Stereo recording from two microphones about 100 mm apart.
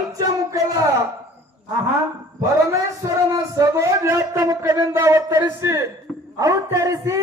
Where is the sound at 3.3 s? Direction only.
35° right (ahead or behind).